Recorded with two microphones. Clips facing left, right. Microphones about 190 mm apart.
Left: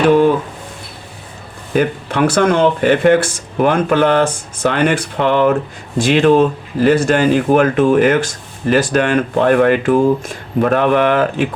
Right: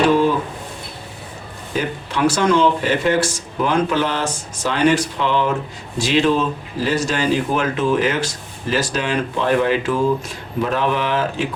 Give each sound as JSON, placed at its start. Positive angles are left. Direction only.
{"t": 1.7, "sound": "speech", "side_deg": 55}